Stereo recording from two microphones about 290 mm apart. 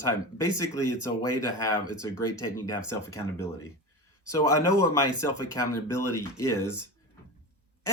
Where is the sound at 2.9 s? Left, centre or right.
Centre.